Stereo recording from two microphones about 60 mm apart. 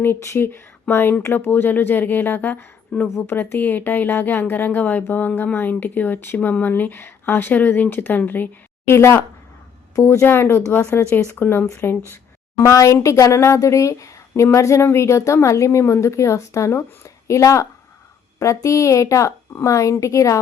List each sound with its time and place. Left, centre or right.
0.2 s speech: left
8.9 s speech: left
10.2 s speech: left
12.5 s speech: left